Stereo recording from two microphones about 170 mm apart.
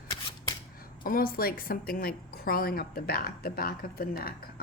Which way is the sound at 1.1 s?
60° left (ahead or behind).